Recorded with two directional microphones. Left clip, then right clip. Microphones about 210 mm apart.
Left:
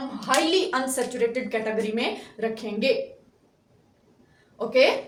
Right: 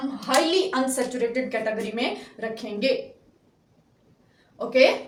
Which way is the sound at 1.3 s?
20° left (ahead or behind).